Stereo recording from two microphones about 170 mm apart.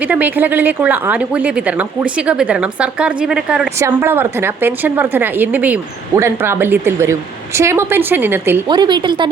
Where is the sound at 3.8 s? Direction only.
20° right (ahead or behind).